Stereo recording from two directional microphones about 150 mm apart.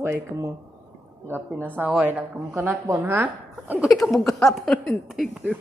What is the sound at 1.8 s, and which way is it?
Speech, 10° right (ahead or behind).